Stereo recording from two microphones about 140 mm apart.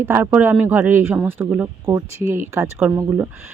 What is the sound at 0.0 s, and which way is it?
Speech, 15° right (ahead or behind).